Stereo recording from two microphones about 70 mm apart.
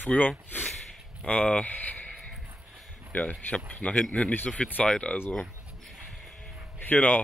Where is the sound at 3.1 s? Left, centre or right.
Centre.